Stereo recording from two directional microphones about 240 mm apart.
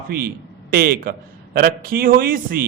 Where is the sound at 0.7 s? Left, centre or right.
Right.